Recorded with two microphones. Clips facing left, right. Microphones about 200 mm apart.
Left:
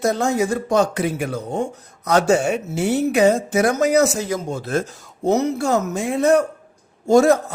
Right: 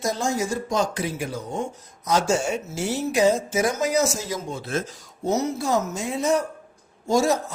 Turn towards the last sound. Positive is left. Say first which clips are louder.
# left 7 dB
turn(degrees=60)  # may be behind; listen again after turning